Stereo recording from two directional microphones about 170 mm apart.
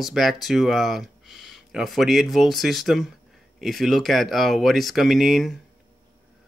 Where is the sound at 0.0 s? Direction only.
Centre (ahead or behind).